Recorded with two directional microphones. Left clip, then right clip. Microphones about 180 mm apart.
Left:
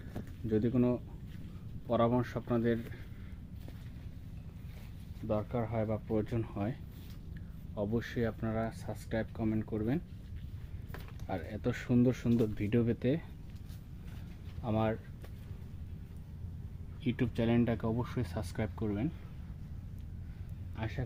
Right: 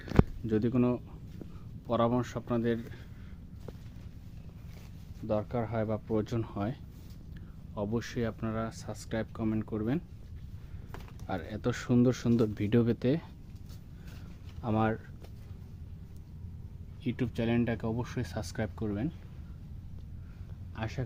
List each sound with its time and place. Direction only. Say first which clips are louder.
0.4 s speech: left 4 dB; 20° right (ahead or behind)
5.3 s speech: right 3 dB; 20° right (ahead or behind)
7.8 s speech: right 1 dB; 15° right (ahead or behind)
11.3 s speech: right 3 dB; 20° right (ahead or behind)
14.6 s speech: right 3 dB; 35° right (ahead or behind)
17.0 s speech: even; 10° right (ahead or behind)
20.7 s speech: right 3 dB; 30° right (ahead or behind)